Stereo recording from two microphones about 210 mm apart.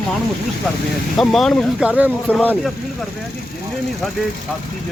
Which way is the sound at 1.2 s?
Centre (ahead or behind).